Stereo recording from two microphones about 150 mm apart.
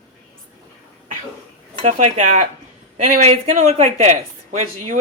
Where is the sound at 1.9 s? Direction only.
55° right (ahead or behind).